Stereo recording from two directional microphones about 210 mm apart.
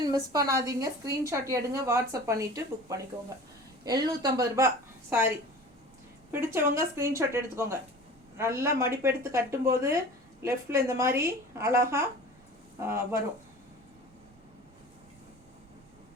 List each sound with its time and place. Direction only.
0.0 s a woman's voice: 15° right (ahead or behind)
6.3 s a woman's voice: 10° right (ahead or behind)